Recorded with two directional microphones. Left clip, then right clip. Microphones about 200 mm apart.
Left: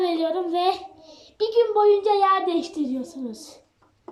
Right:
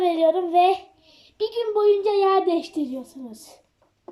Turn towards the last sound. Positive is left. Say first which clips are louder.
# left 6 dB
turn(degrees=-5)  # may be behind; listen again after turning